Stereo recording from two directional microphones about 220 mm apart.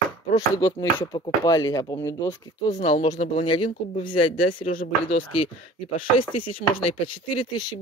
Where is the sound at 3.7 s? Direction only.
40° left (ahead or behind).